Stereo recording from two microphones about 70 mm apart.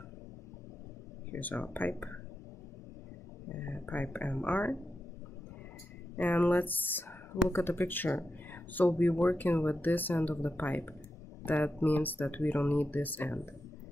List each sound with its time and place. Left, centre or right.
1.3 s speech: left
3.5 s speech: left
6.1 s speech: left